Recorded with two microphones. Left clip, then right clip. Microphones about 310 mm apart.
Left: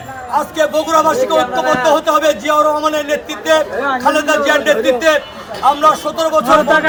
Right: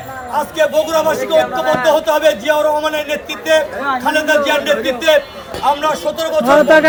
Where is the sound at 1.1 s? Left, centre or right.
Left.